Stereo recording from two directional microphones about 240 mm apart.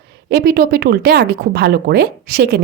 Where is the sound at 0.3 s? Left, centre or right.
Right.